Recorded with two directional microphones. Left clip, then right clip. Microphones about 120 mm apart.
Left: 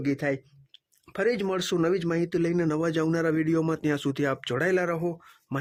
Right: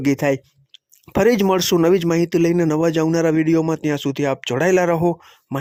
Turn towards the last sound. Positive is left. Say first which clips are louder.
# right 10 dB
turn(degrees=-50)  # may be behind; listen again after turning